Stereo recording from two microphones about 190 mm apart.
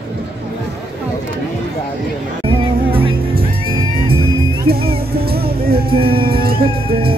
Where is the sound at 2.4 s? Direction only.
30° right (ahead or behind).